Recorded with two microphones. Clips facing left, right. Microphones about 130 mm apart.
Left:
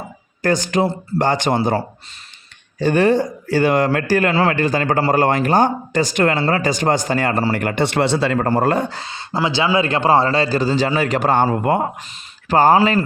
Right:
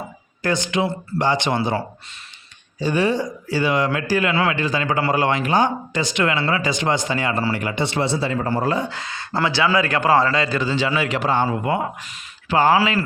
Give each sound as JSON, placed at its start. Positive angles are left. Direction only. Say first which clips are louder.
{"t": 0.4, "sound": "a man's voice", "louder": "left 4 dB", "side_deg": 45}
{"t": 2.7, "sound": "a man's voice", "louder": "left 5 dB", "side_deg": 55}
{"t": 8.9, "sound": "a man's voice", "louder": "left 1 dB", "side_deg": 30}